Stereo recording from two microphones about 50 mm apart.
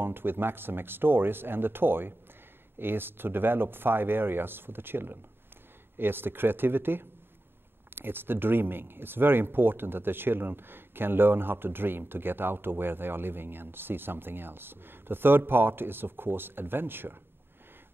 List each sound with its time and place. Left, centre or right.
0.0 s speech: right